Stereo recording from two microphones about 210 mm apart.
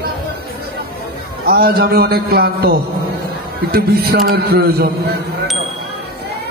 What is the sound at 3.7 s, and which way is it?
A man's voice, 50° right (ahead or behind).